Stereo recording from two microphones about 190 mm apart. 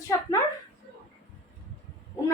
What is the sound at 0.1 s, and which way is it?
Speech, 20° left (ahead or behind).